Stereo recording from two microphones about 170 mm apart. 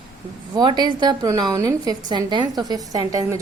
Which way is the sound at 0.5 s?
25° right (ahead or behind).